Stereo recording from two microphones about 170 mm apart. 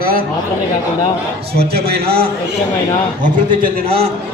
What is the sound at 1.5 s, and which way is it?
Speech, 70° right (ahead or behind).